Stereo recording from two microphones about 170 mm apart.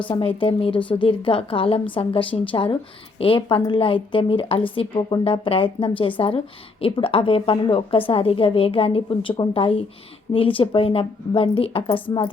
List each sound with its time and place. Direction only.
0.1 s a woman's voice: 30° left (ahead or behind)